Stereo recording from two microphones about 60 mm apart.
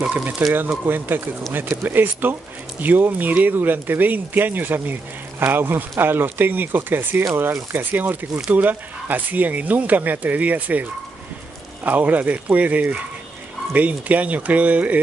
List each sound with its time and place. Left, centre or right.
0.4 s speech: right